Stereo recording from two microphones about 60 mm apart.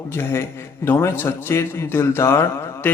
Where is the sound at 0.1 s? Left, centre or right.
Left.